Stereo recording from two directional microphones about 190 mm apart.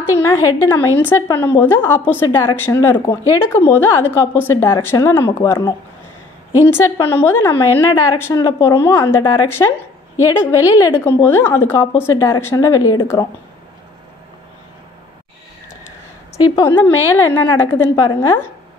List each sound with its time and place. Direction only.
0.2 s a woman's voice: 10° left (ahead or behind)
16.5 s a woman's voice: 10° left (ahead or behind)